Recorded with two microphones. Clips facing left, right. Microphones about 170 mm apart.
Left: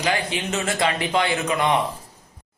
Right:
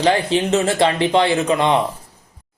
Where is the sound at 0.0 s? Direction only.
30° right (ahead or behind).